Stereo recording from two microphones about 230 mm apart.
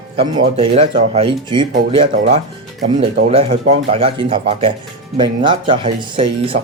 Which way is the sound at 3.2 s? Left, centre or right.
Right.